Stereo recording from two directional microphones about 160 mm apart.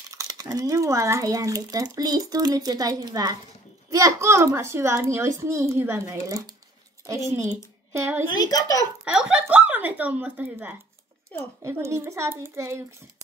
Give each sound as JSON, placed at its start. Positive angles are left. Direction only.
{"t": 0.1, "sound": "a child's voice", "side_deg": -20}
{"t": 8.3, "sound": "speech", "side_deg": 25}
{"t": 9.1, "sound": "speech", "side_deg": -5}
{"t": 11.3, "sound": "a woman's voice", "side_deg": 10}
{"t": 11.6, "sound": "speech", "side_deg": -15}